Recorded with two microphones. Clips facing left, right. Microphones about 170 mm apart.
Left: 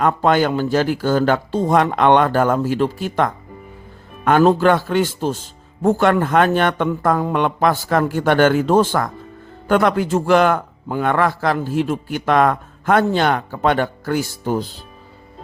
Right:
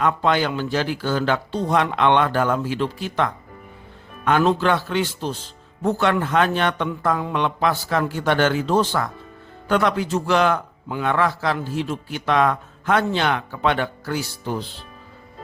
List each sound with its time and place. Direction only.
0.0 s a man's voice: 45° left (ahead or behind)